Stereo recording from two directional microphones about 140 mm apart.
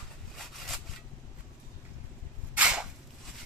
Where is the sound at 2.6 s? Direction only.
5° right (ahead or behind).